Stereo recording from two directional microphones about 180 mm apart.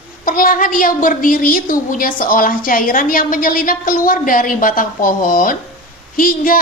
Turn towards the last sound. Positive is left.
turn(degrees=50)  # may be behind; listen again after turning